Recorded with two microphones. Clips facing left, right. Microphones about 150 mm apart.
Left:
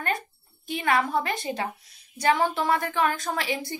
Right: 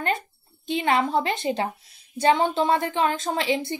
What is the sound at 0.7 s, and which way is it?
A woman's voice, 25° right (ahead or behind).